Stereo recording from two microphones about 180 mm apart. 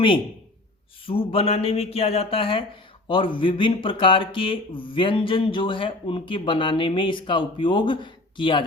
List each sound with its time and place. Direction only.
1.0 s speech: 30° left (ahead or behind)